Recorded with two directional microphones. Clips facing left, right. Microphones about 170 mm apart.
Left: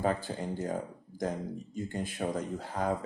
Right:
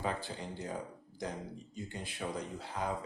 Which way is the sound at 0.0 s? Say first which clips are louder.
Left 7 dB; 45° left (ahead or behind).